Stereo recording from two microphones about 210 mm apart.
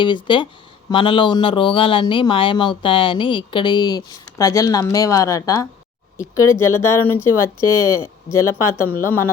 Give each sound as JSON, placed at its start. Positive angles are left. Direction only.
{"t": 0.0, "sound": "speech", "side_deg": 20}